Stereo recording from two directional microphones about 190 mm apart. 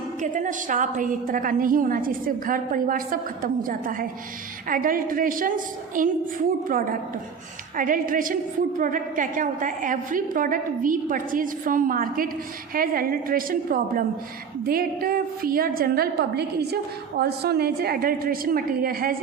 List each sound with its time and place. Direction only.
0.2 s a woman's voice: 40° right (ahead or behind)
7.8 s a woman's voice: 45° right (ahead or behind)